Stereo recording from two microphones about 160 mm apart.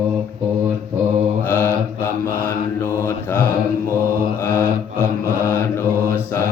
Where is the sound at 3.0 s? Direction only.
15° left (ahead or behind).